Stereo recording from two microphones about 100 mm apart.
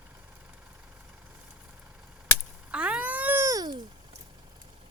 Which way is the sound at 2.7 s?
10° right (ahead or behind).